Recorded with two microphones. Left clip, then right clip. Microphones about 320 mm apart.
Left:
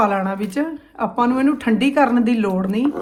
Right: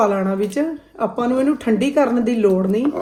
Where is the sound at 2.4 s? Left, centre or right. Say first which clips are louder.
Right 5 dB; left.